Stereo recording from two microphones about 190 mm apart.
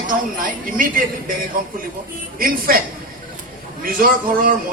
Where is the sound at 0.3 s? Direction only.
45° right (ahead or behind).